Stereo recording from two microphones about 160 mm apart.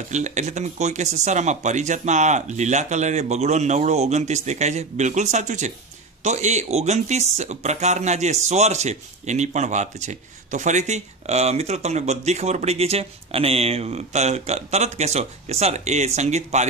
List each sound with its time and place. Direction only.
0.1 s speech: 50° right (ahead or behind)